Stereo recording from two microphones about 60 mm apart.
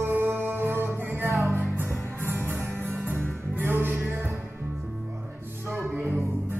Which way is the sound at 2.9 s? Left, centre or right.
Right.